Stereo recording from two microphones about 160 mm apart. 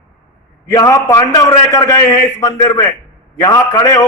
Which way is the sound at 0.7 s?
20° left (ahead or behind).